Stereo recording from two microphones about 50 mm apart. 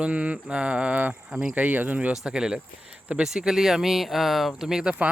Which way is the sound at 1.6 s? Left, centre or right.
Right.